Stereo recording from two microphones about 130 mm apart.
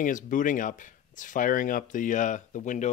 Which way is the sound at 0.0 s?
90° left.